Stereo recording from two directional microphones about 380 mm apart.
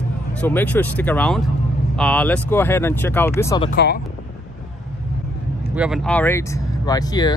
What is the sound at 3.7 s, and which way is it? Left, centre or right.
Speech, left.